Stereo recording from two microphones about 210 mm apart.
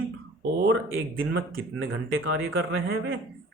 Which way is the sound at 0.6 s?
65° right (ahead or behind).